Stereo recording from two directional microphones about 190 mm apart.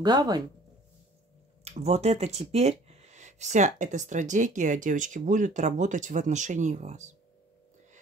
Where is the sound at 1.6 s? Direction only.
35° right (ahead or behind).